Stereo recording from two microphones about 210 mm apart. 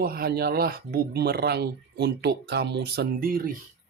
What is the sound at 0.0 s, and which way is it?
Speech, 45° right (ahead or behind).